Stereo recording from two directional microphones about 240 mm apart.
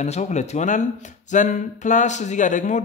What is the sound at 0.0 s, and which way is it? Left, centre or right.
Speech, left.